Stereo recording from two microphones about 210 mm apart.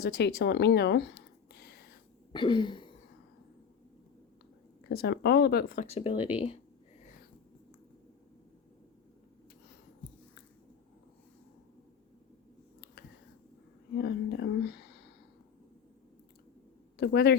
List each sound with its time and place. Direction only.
0.0 s speech: 50° left (ahead or behind)
2.3 s a sound: 20° left (ahead or behind)
4.9 s speech: 50° left (ahead or behind); by 6.2 s 30° left (ahead or behind)
6.3 s a sound: 30° left (ahead or behind)
14.0 s speech: 50° left (ahead or behind)
17.0 s speech: 50° left (ahead or behind)